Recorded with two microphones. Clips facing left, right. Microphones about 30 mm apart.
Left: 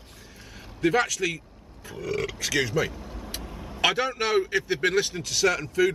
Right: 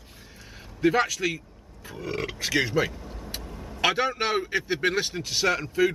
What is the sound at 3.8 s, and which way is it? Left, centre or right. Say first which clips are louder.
Speech: even; centre.